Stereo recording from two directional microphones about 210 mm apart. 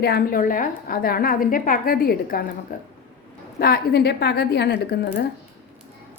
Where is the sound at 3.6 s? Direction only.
50° left (ahead or behind).